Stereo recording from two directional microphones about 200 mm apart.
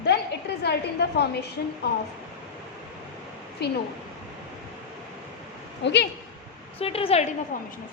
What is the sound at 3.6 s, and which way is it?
Speech, 55° left (ahead or behind).